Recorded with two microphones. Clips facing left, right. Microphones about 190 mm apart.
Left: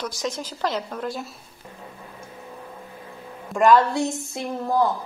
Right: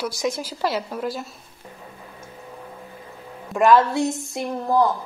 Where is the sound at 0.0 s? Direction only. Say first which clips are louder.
Right 3 dB; 10° right (ahead or behind).